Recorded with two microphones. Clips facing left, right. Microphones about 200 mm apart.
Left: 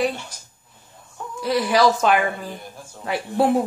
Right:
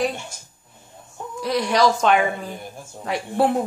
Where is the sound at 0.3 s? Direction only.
25° right (ahead or behind).